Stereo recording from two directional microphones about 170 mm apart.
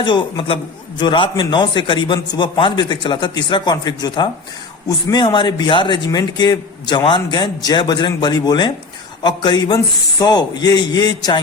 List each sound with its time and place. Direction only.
0.0 s a man's voice: 25° left (ahead or behind)